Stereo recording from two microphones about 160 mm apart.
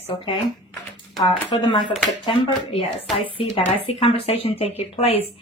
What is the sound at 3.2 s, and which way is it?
Speech, 35° left (ahead or behind).